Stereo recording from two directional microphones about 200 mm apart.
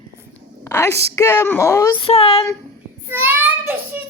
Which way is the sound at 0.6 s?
15° left (ahead or behind).